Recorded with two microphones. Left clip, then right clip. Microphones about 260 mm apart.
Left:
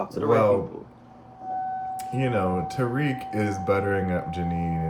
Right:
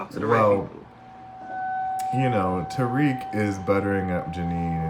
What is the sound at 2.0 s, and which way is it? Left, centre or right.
Speech, centre.